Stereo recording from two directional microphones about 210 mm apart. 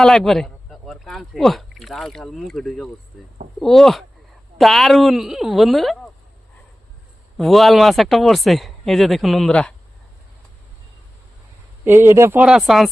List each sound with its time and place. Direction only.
0.0 s speech: centre (ahead or behind)
7.3 s speech: centre (ahead or behind)
11.9 s speech: 10° right (ahead or behind)